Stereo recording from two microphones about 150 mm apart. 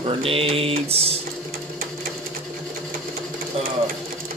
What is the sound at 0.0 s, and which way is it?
Mantra, 35° right (ahead or behind).